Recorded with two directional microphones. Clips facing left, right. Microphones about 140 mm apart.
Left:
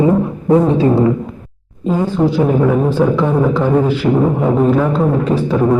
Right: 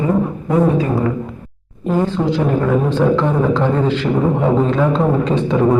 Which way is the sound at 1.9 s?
10° left (ahead or behind).